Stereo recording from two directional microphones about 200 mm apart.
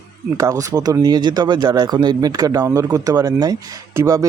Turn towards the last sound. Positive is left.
turn(degrees=-15)  # may be behind; listen again after turning